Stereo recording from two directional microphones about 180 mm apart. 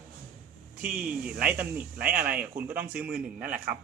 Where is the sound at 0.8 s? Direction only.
5° right (ahead or behind).